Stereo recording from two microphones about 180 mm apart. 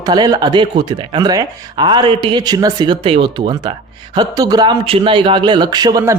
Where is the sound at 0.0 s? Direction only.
20° right (ahead or behind).